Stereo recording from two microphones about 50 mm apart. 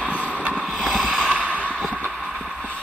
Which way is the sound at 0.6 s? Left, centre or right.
Centre.